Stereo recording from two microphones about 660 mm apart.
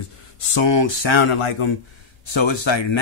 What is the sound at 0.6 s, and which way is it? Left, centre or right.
Speech, left.